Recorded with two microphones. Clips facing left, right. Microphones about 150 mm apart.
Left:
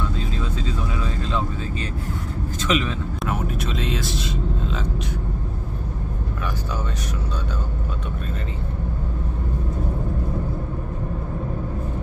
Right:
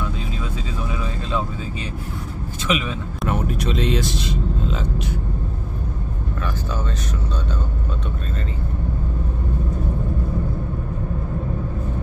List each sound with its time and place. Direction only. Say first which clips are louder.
2.6 s speech: left 1 dB; 10° right (ahead or behind)
3.3 s speech: right 4 dB; 5° left (ahead or behind)